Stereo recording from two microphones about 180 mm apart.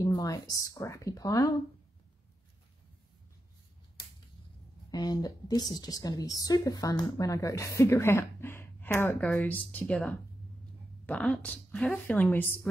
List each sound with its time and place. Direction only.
0.0 s speech: 20° left (ahead or behind)
4.9 s a woman's voice: 20° left (ahead or behind)